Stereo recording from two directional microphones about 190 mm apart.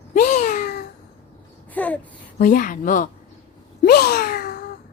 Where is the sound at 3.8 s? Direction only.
55° left (ahead or behind).